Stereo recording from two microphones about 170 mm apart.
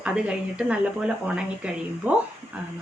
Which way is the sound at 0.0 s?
5° right (ahead or behind).